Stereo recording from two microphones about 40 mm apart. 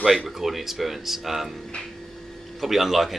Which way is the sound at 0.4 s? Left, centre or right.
Centre.